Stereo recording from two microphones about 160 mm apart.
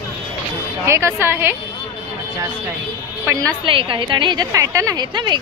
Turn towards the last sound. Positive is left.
turn(degrees=-25)  # may be behind; listen again after turning